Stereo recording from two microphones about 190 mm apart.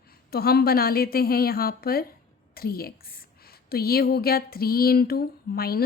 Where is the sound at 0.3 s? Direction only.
55° left (ahead or behind).